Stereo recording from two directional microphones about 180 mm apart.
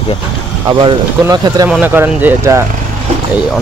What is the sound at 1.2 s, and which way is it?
Speech, 20° right (ahead or behind).